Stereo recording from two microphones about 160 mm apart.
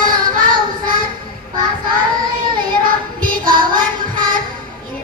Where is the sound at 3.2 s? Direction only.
60° right (ahead or behind).